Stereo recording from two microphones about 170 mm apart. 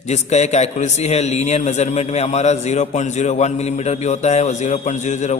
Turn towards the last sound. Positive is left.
turn(degrees=45)  # may be behind; listen again after turning